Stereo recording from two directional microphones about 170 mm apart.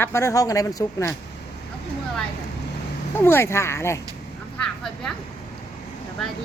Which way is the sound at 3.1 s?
15° left (ahead or behind).